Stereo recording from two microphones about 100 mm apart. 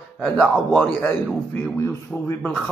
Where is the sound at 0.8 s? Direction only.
20° left (ahead or behind).